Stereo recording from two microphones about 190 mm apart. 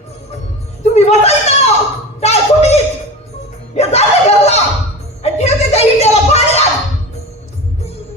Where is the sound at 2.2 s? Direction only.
35° left (ahead or behind).